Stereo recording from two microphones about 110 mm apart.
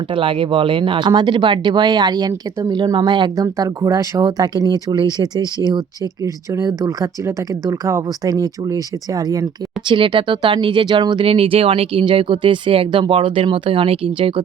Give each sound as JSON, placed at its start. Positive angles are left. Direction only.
{"t": 0.1, "sound": "speech", "side_deg": -50}
{"t": 3.3, "sound": "speech", "side_deg": -30}
{"t": 9.9, "sound": "speech", "side_deg": -50}
{"t": 11.3, "sound": "speech", "side_deg": -60}